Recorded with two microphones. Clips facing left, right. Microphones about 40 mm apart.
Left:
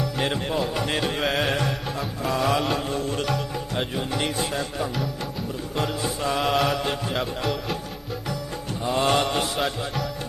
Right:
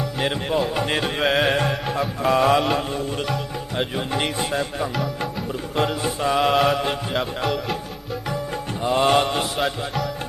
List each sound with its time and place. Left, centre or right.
0.2 s music: centre
2.3 s music: right
2.7 s music: centre
3.9 s music: centre
6.2 s music: centre
8.9 s mantra: centre